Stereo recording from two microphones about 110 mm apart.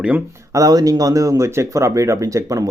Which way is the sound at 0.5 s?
35° right (ahead or behind).